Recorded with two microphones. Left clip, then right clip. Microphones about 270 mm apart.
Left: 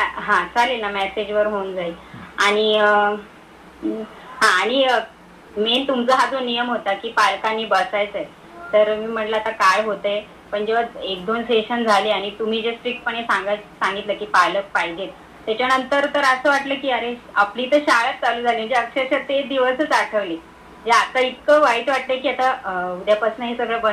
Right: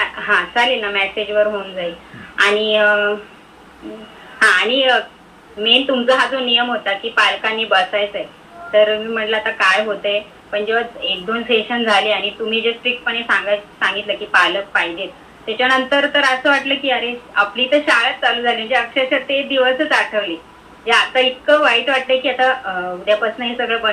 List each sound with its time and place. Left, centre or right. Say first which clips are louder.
0.2 s a woman's voice: right 3 dB; left
4.4 s a woman's voice: right 3 dB; left